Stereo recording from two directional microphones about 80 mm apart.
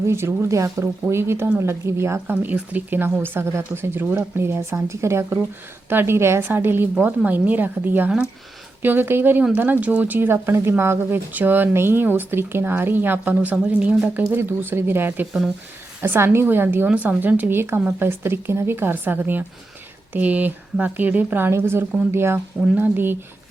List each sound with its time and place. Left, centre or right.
0.1 s speech: right
2.3 s speech: right
22.6 s speech: centre